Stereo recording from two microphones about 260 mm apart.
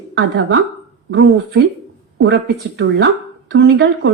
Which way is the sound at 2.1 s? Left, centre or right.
Right.